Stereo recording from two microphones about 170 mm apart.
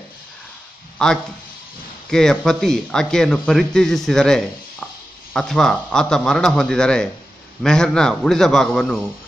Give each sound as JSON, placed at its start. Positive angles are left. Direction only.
{"t": 0.9, "sound": "a man's voice", "side_deg": 5}